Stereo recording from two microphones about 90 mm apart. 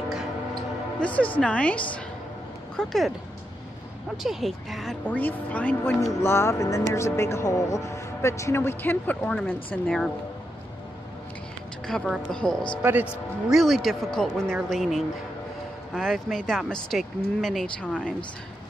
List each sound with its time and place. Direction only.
0.9 s a woman's voice: 15° left (ahead or behind)
2.8 s speech: 5° left (ahead or behind)
4.2 s speech: centre (ahead or behind)
5.0 s a woman's voice: 15° left (ahead or behind)
6.2 s speech: 30° left (ahead or behind)
9.8 s speech: 5° left (ahead or behind)
11.9 s a woman's voice: 5° left (ahead or behind)
17.8 s a woman's voice: 15° left (ahead or behind)